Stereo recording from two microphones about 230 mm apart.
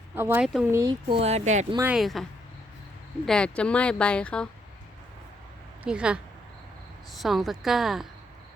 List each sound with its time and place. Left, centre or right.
0.1 s speech: centre
0.7 s speech: centre
1.7 s speech: centre
3.2 s speech: centre
5.8 s speech: centre